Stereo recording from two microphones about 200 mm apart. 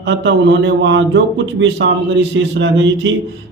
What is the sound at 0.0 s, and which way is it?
Speech, 65° right (ahead or behind).